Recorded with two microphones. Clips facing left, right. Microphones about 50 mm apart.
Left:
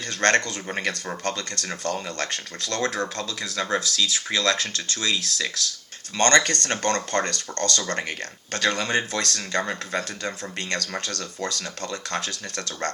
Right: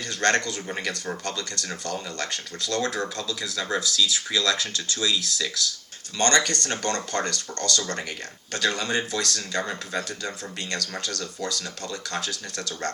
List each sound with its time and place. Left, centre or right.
0.1 s speech: left